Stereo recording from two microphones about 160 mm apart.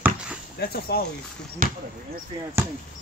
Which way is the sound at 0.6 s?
75° left (ahead or behind).